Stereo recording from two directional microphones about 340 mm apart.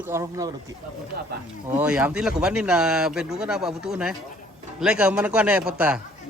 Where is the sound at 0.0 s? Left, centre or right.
Centre.